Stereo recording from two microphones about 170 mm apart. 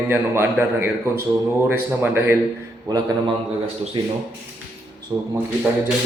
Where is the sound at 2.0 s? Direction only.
15° right (ahead or behind).